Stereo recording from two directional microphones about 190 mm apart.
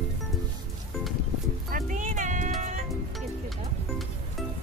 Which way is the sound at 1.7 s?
40° right (ahead or behind).